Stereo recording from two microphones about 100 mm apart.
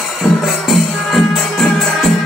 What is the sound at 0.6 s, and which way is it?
Music, centre (ahead or behind).